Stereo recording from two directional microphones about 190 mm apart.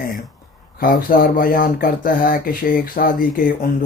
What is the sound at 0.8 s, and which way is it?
Speech, 50° left (ahead or behind).